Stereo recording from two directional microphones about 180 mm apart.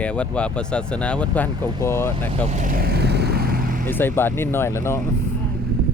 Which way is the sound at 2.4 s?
45° right (ahead or behind).